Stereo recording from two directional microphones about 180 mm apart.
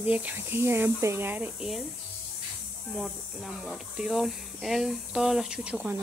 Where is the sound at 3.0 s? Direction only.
Centre (ahead or behind).